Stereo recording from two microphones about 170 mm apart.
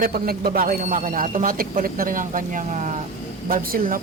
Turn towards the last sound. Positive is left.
turn(degrees=-55)  # may be behind; listen again after turning